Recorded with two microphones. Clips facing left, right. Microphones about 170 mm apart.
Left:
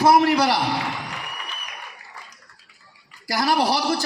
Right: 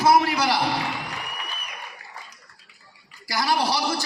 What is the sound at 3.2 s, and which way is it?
Speech, 50° left (ahead or behind).